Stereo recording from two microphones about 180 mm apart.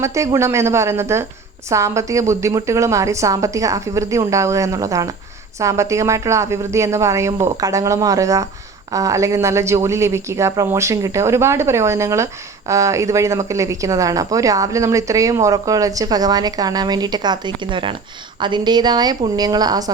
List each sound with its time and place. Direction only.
0.0 s a woman's voice: 15° right (ahead or behind)